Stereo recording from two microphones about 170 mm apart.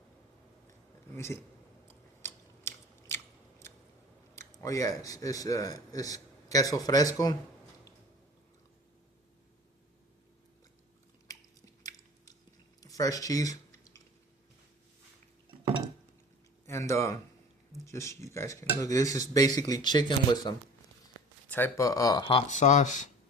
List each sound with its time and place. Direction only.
1.1 s speech: 15° left (ahead or behind)
1.9 s biting: 15° left (ahead or behind)
4.6 s a man's voice: 20° left (ahead or behind)
11.8 s chewing: 20° left (ahead or behind)
12.8 s a sound: 20° left (ahead or behind)
16.6 s a man's voice: 15° left (ahead or behind)
22.5 s speech: 45° left (ahead or behind)